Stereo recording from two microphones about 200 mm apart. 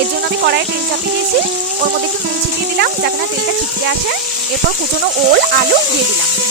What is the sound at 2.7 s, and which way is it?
Speech, 55° right (ahead or behind).